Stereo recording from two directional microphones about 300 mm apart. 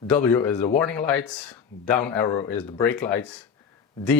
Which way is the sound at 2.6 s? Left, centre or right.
Centre.